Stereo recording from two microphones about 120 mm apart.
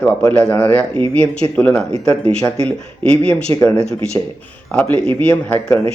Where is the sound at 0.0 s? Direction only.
10° left (ahead or behind).